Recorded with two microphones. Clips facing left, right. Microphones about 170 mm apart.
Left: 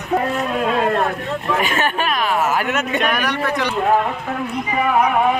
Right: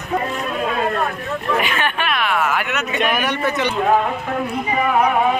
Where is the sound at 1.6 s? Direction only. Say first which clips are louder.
Left 2 dB; 45° left (ahead or behind).